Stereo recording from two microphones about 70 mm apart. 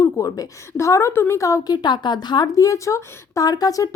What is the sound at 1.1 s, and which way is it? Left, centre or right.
Speech, left.